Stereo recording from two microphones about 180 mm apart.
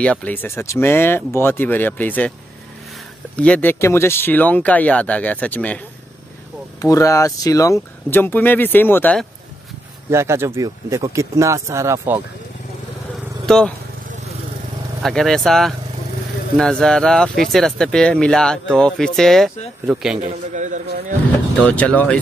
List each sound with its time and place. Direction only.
0.0 s speech: 5° left (ahead or behind)
3.3 s speech: 5° left (ahead or behind)
6.8 s speech: 20° left (ahead or behind)
10.1 s speech: 15° right (ahead or behind)
13.5 s speech: 5° left (ahead or behind)
15.0 s speech: centre (ahead or behind)
20.2 s a man's voice: 40° right (ahead or behind)
21.5 s speech: 5° left (ahead or behind)